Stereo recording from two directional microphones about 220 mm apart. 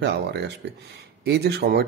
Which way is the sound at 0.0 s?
50° right (ahead or behind).